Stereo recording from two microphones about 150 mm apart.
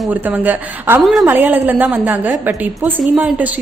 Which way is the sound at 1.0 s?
Centre (ahead or behind).